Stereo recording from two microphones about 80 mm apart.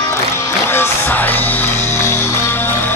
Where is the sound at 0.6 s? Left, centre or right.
Left.